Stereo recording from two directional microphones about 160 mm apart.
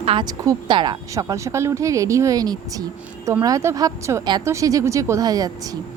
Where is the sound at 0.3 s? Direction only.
25° right (ahead or behind).